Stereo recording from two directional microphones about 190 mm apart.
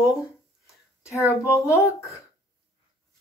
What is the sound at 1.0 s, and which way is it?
Speech, 15° left (ahead or behind).